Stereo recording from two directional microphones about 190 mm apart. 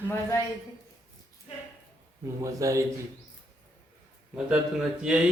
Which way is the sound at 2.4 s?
15° right (ahead or behind).